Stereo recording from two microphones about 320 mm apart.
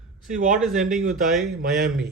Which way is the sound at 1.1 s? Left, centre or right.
Centre.